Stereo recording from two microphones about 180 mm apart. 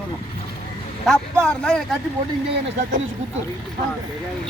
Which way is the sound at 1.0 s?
5° left (ahead or behind).